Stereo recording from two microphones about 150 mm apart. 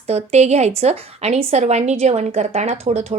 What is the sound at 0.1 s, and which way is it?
A woman's voice, 45° right (ahead or behind).